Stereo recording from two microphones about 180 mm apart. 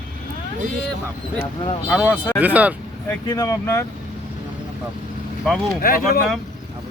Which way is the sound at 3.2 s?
20° left (ahead or behind).